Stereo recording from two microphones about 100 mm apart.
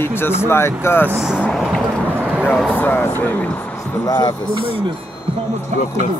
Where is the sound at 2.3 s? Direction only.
5° right (ahead or behind).